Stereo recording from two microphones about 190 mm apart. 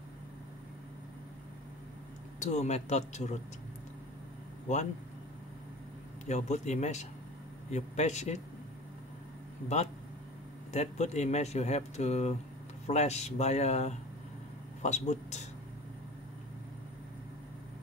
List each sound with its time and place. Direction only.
2.4 s speech: 35° left (ahead or behind)
6.2 s speech: 35° left (ahead or behind)
10.7 s speech: 35° left (ahead or behind)